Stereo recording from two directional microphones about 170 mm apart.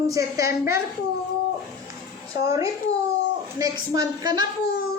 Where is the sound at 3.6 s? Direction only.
20° right (ahead or behind).